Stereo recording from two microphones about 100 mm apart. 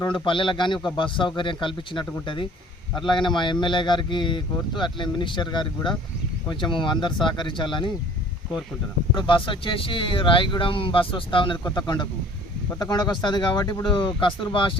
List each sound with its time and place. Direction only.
0.1 s a man's voice: 55° left (ahead or behind)
9.1 s a man's voice: 55° left (ahead or behind)